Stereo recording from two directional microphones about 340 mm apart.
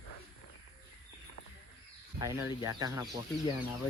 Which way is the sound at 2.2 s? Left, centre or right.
Centre.